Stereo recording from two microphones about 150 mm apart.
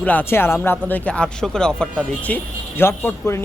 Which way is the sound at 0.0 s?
10° left (ahead or behind).